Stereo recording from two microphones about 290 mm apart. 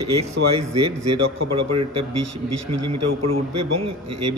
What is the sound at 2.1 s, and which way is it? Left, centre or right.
Speech, right.